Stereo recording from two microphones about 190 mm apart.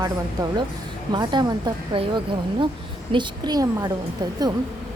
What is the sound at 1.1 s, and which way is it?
Speech, 20° right (ahead or behind).